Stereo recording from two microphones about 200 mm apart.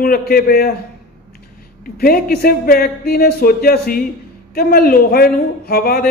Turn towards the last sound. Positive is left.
turn(degrees=50)  # may be behind; listen again after turning